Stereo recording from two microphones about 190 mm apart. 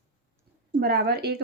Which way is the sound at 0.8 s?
55° right (ahead or behind).